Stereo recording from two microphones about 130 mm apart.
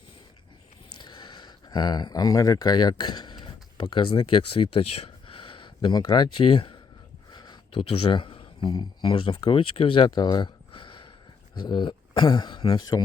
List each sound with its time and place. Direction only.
1.0 s speech: 35° left (ahead or behind)
7.3 s a sound: 35° left (ahead or behind)
7.7 s speech: 45° left (ahead or behind)